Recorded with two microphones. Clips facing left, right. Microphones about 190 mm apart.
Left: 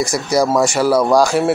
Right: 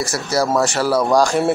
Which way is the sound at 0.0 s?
15° left (ahead or behind).